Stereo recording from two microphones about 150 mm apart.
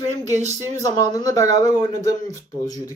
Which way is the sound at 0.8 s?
25° left (ahead or behind).